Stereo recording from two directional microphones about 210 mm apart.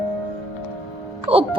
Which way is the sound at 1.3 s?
30° right (ahead or behind).